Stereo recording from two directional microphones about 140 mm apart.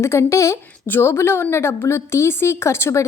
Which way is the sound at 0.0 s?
20° left (ahead or behind).